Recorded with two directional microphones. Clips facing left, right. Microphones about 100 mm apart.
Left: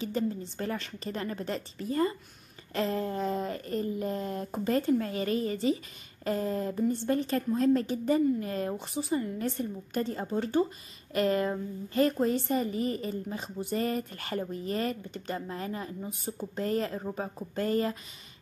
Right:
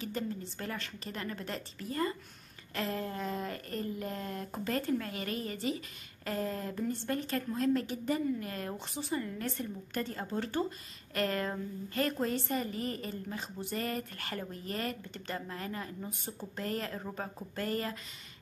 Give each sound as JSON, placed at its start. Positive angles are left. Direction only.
{"t": 0.0, "sound": "a woman's voice", "side_deg": 25}
{"t": 16.0, "sound": "speech", "side_deg": 10}
{"t": 16.5, "sound": "a woman's voice", "side_deg": 25}
{"t": 17.0, "sound": "speech", "side_deg": 10}
{"t": 17.6, "sound": "a woman's voice", "side_deg": 25}